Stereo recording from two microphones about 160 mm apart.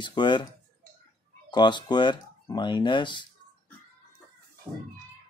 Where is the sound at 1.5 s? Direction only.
30° left (ahead or behind).